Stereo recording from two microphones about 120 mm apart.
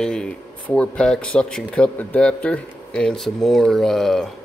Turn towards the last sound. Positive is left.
turn(degrees=0)  # may be behind; listen again after turning